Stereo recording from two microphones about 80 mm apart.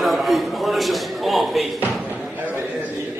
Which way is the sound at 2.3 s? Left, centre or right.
Right.